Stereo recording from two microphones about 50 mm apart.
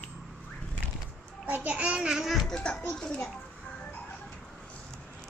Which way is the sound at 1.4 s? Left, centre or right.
Right.